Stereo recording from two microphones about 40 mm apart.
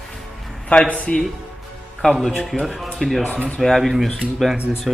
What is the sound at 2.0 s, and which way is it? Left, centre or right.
Speech, centre.